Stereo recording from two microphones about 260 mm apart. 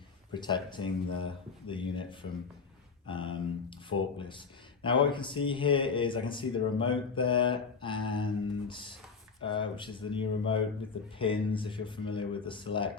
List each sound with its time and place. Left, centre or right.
0.3 s speech: centre